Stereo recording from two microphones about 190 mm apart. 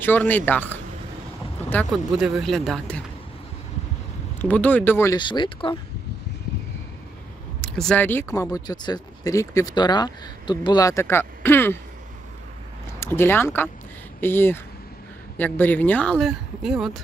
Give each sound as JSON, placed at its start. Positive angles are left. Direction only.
{"t": 0.0, "sound": "speech", "side_deg": 10}
{"t": 4.4, "sound": "speech", "side_deg": 10}
{"t": 7.6, "sound": "speech", "side_deg": 5}
{"t": 13.0, "sound": "speech", "side_deg": 10}